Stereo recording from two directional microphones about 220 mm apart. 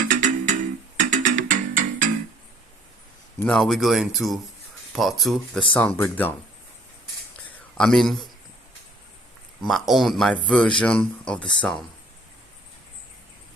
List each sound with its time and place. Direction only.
0.1 s music: 35° right (ahead or behind)
3.4 s speech: centre (ahead or behind)
7.8 s speech: centre (ahead or behind)
9.6 s speech: centre (ahead or behind)